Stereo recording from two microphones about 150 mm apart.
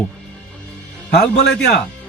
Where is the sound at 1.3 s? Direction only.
90° left.